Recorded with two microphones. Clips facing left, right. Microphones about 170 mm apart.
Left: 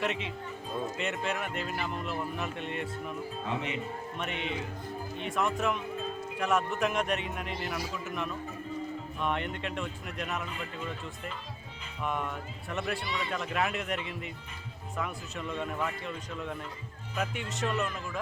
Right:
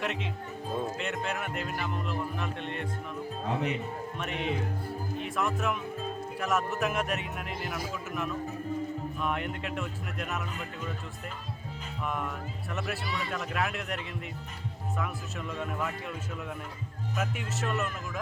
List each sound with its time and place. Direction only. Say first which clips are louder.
0.0 s speech: left 1 dB; centre (ahead or behind)
3.4 s speech: right 5 dB; 40° right (ahead or behind)
4.2 s speech: right 3 dB; centre (ahead or behind)
12.0 s speech: left 1 dB; centre (ahead or behind)